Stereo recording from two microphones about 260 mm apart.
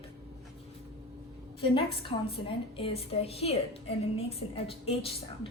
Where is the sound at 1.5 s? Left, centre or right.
Centre.